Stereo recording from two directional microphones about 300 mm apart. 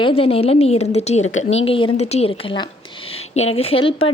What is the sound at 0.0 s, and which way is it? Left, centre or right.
A woman's voice, centre.